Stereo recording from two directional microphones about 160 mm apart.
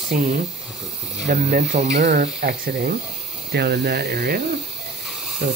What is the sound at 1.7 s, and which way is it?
Speech, 45° right (ahead or behind).